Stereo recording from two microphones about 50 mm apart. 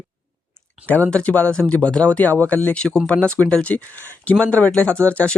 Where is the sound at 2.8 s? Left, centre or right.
Centre.